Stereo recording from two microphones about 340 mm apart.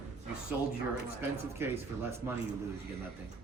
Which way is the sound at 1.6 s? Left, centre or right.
Centre.